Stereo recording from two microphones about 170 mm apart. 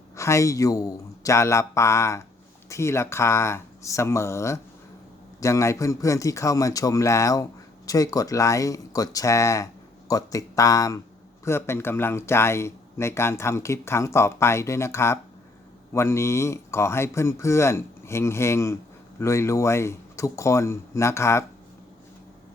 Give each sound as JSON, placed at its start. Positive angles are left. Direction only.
{"t": 0.2, "sound": "a man's voice", "side_deg": 15}